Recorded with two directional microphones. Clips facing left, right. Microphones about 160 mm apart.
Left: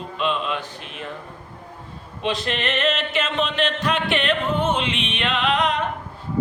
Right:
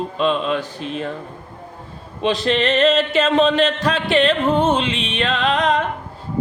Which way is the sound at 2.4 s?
35° right (ahead or behind).